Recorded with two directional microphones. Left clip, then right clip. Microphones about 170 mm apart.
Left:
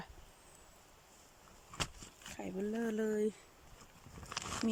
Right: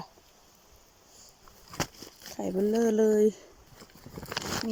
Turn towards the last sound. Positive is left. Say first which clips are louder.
# right 9 dB
turn(degrees=-55)  # may be behind; listen again after turning